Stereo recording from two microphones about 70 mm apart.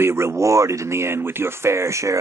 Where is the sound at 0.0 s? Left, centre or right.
Right.